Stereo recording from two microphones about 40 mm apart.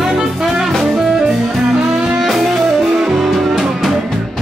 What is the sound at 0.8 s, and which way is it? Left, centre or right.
Music, centre.